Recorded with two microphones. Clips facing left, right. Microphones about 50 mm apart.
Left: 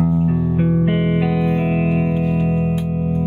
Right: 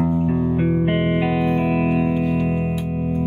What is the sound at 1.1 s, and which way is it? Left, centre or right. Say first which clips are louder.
Music: left 1 dB; right.